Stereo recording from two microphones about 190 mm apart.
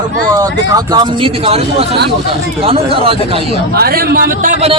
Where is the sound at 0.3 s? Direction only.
20° right (ahead or behind).